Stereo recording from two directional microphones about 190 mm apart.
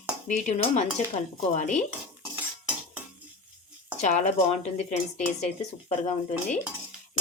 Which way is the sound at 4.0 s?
40° left (ahead or behind).